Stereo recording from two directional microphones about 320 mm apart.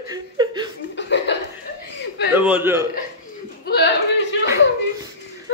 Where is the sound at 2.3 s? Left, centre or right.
Centre.